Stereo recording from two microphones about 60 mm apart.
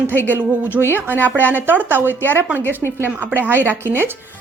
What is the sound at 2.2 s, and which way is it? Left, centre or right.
Speech, left.